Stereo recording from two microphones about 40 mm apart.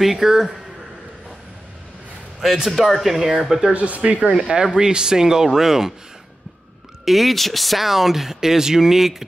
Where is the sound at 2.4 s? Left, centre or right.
Centre.